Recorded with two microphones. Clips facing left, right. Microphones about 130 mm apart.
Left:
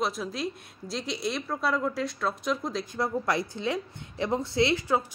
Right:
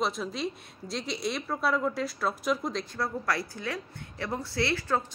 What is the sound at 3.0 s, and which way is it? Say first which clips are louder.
A woman's voice: left 5 dB; 20° left (ahead or behind).